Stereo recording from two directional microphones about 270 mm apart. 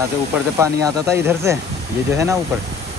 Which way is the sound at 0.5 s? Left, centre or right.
Centre.